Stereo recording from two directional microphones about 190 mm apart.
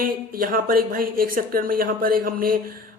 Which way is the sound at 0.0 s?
50° right (ahead or behind).